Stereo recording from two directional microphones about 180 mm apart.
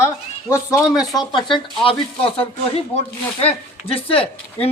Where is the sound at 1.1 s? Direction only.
25° left (ahead or behind).